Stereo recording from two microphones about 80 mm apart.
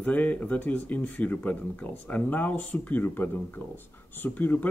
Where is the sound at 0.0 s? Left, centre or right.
Left.